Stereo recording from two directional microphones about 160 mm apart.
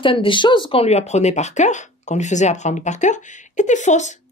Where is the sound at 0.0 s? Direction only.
35° left (ahead or behind).